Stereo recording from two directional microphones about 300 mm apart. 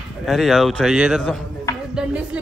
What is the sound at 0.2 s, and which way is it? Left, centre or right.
A man's voice, centre.